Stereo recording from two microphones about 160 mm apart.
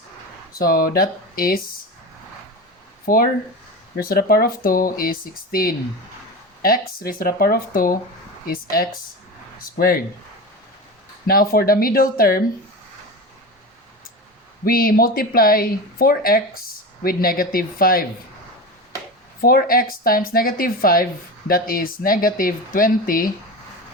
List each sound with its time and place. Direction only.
0.6 s speech: 65° left (ahead or behind)
3.1 s speech: 65° left (ahead or behind)
3.9 s speech: 75° left (ahead or behind)
11.3 s speech: 70° left (ahead or behind)
14.6 s speech: 65° left (ahead or behind)
19.4 s speech: 70° left (ahead or behind)